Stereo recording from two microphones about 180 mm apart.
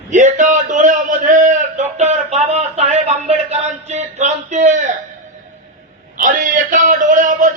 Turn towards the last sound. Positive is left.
turn(degrees=-45)  # may be behind; listen again after turning